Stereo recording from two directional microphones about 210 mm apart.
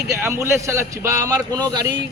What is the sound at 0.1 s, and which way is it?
A man's voice, 15° right (ahead or behind).